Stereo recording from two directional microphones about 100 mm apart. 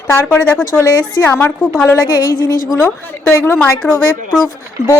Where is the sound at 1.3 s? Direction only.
25° left (ahead or behind).